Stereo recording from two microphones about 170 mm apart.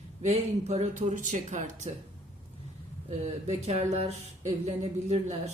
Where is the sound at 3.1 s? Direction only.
40° right (ahead or behind).